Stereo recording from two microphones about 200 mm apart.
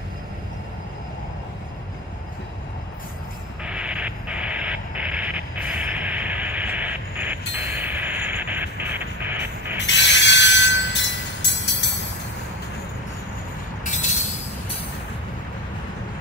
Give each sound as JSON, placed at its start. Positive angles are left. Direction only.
{"t": 3.6, "sound": "a sound", "side_deg": -5}
{"t": 7.7, "sound": "music", "side_deg": -10}
{"t": 9.8, "sound": "train", "side_deg": 60}
{"t": 13.8, "sound": "train", "side_deg": 35}